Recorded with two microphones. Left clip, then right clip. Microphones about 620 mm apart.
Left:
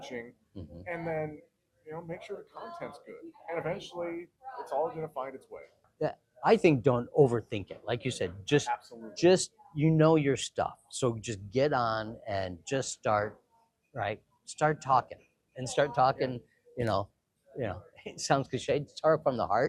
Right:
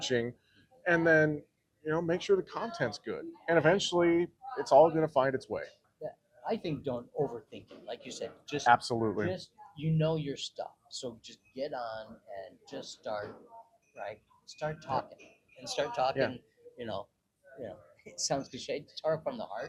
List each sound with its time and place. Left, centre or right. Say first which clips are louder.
0.9 s speech: right 10 dB; right
6.0 s speech: left 10 dB; left
8.7 s speech: right 10 dB; right
9.1 s speech: left 10 dB; left
9.8 s speech: left 8 dB; left
15.6 s speech: left 5 dB; left